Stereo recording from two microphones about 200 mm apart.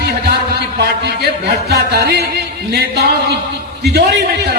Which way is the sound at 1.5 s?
55° right (ahead or behind).